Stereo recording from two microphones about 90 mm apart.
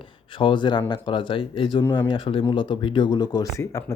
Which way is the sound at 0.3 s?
65° left (ahead or behind).